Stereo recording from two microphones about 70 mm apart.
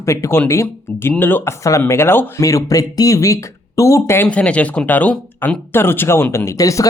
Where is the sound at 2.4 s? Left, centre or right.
Left.